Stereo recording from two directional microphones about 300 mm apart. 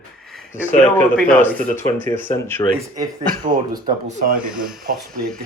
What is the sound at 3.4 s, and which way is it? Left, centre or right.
Speech, right.